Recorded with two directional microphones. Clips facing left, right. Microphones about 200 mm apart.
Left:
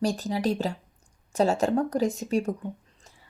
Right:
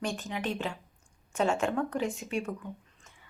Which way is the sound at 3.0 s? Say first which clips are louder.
Left 3 dB; 35° left (ahead or behind).